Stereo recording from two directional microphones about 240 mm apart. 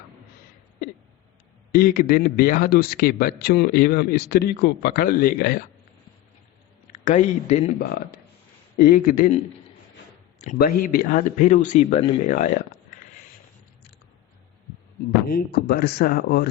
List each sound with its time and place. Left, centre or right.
1.7 s a man's voice: left
7.0 s a man's voice: left
8.8 s a man's voice: left
10.4 s a man's voice: left
15.3 s a man's voice: left